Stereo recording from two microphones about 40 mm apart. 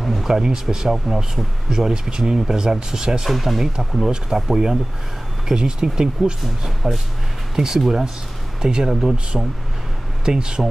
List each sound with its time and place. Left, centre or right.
0.0 s a sound: centre
0.3 s speech: centre
3.3 s speech: centre
6.6 s speech: centre
7.5 s speech: centre